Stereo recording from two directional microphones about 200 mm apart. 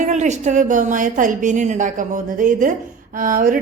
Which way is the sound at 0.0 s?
35° right (ahead or behind).